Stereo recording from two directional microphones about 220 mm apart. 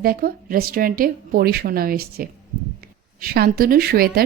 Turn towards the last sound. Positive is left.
turn(degrees=-45)  # may be behind; listen again after turning